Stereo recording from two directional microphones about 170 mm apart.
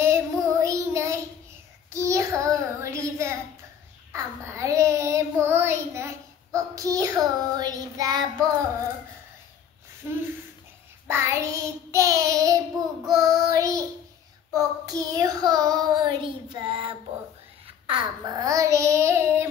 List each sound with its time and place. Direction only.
0.0 s child singing: 15° right (ahead or behind)
10.0 s a sound: 10° right (ahead or behind)
11.1 s child singing: 15° right (ahead or behind)